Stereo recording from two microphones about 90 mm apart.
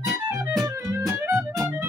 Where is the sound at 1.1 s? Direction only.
25° right (ahead or behind).